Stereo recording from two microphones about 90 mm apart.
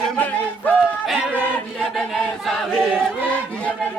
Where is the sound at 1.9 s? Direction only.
Centre (ahead or behind).